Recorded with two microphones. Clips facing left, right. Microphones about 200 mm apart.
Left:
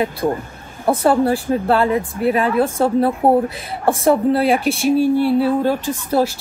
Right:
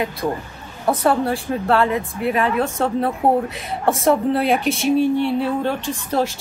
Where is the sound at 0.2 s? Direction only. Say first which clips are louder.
Left 4 dB; 20° left (ahead or behind).